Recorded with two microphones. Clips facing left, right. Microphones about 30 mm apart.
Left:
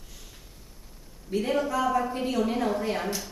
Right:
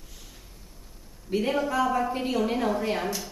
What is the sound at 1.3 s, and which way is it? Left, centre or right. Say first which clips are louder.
A woman's voice: right 1 dB; centre.